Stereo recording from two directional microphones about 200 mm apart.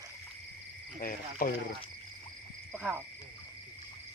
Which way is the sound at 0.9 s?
45° left (ahead or behind).